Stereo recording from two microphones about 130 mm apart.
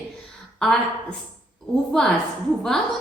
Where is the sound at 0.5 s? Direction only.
5° left (ahead or behind).